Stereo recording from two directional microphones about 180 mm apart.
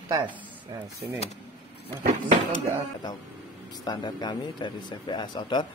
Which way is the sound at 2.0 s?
45° right (ahead or behind).